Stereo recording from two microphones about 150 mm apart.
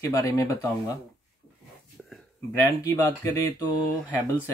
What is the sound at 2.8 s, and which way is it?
Speech, 20° left (ahead or behind).